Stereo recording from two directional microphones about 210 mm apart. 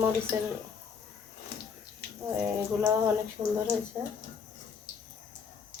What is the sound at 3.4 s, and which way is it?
Speech, 15° right (ahead or behind).